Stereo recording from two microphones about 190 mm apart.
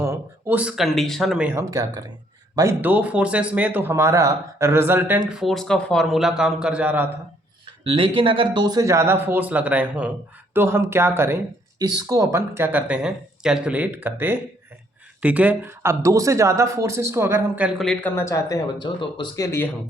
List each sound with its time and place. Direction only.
0.0 s speech: 10° right (ahead or behind)
1.7 s a man's voice: 20° right (ahead or behind)
7.9 s a man's voice: 30° right (ahead or behind); by 18.1 s centre (ahead or behind)
18.1 s speech: 15° left (ahead or behind)